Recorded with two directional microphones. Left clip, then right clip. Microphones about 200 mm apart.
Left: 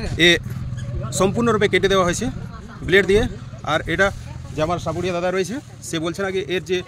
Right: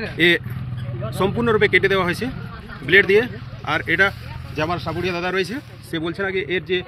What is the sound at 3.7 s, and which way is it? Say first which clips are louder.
Speech: right 1 dB; 70° left (ahead or behind).